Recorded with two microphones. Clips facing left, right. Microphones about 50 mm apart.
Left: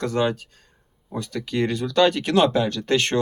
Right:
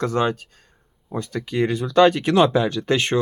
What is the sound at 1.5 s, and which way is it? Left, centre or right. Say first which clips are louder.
Speech: right 3 dB; centre.